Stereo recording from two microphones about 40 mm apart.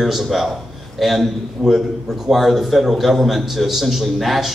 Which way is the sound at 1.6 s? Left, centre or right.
Centre.